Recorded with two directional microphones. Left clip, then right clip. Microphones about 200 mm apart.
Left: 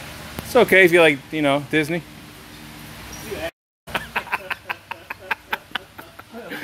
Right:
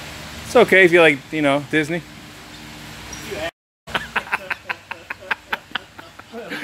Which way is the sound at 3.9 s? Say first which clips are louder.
Right 2 dB; 5° right (ahead or behind).